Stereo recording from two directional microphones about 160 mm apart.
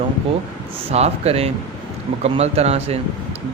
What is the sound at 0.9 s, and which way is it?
Speech, 40° right (ahead or behind).